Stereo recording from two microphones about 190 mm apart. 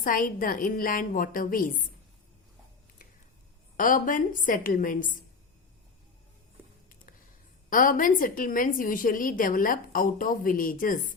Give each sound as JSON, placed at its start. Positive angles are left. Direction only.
{"t": 0.0, "sound": "a woman's voice", "side_deg": 45}
{"t": 3.8, "sound": "a woman's voice", "side_deg": 45}
{"t": 7.7, "sound": "a woman's voice", "side_deg": 45}